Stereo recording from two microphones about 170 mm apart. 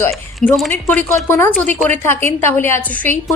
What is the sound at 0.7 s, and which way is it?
A woman's voice, 10° left (ahead or behind).